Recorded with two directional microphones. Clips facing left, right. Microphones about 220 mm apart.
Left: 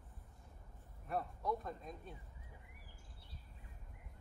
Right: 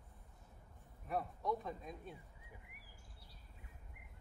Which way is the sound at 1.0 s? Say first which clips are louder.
Even; centre (ahead or behind).